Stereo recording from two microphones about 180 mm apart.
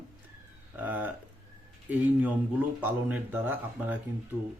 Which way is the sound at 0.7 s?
10° right (ahead or behind).